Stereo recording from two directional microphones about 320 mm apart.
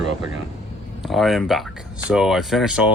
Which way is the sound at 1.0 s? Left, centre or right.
Centre.